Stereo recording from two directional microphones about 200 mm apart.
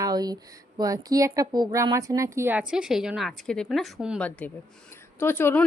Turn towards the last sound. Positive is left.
turn(degrees=10)  # may be behind; listen again after turning